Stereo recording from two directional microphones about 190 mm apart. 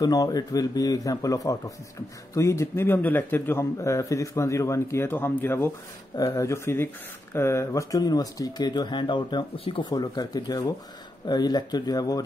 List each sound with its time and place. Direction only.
0.0 s a man's voice: 20° left (ahead or behind)